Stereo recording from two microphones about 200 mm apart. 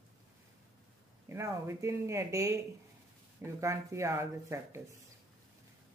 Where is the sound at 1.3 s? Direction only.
15° right (ahead or behind).